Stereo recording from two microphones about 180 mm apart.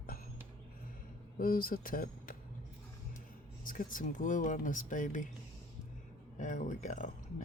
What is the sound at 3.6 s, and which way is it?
Speech, 50° left (ahead or behind).